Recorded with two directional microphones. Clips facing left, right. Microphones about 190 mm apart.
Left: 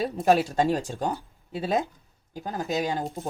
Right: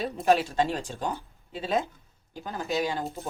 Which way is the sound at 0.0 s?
40° left (ahead or behind).